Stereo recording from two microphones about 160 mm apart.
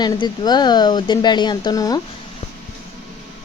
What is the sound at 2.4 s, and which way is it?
Music, 45° left (ahead or behind).